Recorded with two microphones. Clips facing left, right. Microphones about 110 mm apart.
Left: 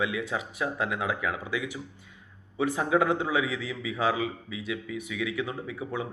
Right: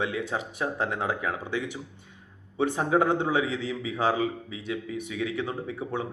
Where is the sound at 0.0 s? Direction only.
30° right (ahead or behind).